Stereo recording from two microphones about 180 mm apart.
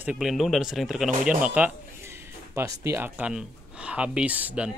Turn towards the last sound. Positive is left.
turn(degrees=-10)  # may be behind; listen again after turning